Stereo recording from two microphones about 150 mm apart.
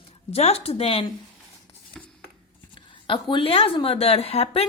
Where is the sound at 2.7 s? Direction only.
35° left (ahead or behind).